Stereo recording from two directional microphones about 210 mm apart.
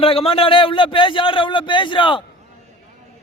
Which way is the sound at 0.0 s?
25° left (ahead or behind).